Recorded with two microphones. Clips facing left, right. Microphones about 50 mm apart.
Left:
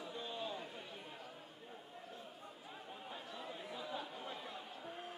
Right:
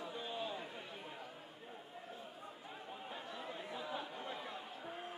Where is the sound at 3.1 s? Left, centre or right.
Centre.